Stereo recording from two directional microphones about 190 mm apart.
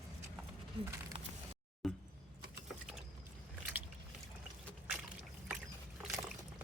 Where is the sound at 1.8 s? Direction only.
Centre (ahead or behind).